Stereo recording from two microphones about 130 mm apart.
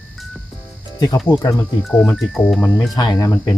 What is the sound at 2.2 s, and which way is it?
Speech, centre (ahead or behind).